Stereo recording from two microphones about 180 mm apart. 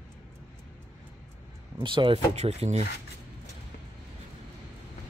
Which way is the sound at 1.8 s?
30° right (ahead or behind).